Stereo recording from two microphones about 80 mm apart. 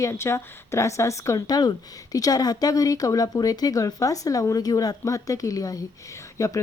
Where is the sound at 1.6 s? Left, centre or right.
Left.